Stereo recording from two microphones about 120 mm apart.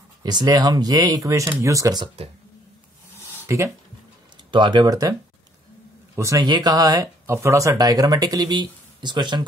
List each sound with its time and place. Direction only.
0.2 s speech: 35° right (ahead or behind)
3.4 s speech: 25° right (ahead or behind)
4.5 s speech: 40° right (ahead or behind)
6.1 s speech: 30° right (ahead or behind)